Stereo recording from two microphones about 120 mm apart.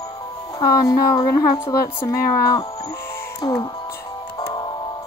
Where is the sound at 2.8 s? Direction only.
25° left (ahead or behind).